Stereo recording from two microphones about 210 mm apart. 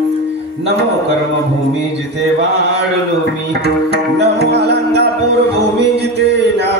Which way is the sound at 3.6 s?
50° right (ahead or behind).